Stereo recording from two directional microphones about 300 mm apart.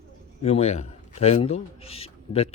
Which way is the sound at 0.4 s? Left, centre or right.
Left.